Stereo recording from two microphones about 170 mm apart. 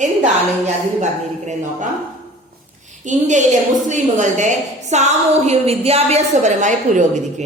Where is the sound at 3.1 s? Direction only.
45° right (ahead or behind).